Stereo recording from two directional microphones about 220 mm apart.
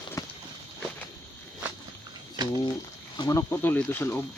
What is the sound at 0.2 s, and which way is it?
Walk, 15° left (ahead or behind).